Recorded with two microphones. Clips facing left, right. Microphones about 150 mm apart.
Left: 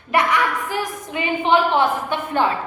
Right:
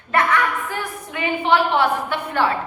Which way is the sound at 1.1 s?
20° left (ahead or behind).